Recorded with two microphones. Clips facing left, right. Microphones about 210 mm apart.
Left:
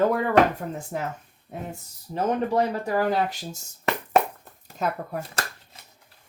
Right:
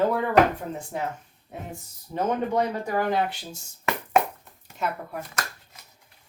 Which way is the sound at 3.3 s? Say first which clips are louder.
Left 3 dB; 40° left (ahead or behind).